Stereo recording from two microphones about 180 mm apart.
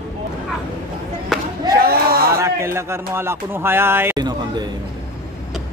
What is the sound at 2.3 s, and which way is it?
Speech, 15° right (ahead or behind).